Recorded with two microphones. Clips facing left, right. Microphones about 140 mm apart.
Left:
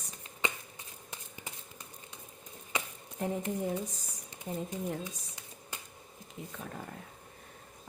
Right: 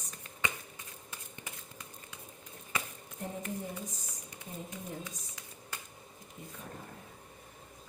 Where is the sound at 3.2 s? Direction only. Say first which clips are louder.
Left 7 dB; 85° left.